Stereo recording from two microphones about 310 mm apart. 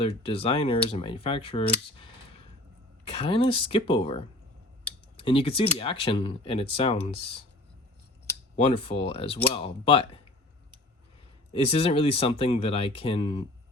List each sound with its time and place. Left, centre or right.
0.0 s speech: centre
3.1 s speech: centre
8.5 s speech: centre
11.5 s speech: centre